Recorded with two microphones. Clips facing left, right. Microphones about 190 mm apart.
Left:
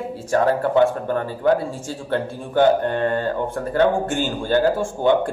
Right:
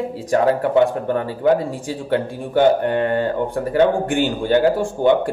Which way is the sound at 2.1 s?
10° right (ahead or behind).